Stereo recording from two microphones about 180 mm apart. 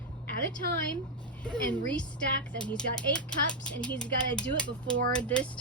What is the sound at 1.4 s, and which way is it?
Speech, 5° left (ahead or behind).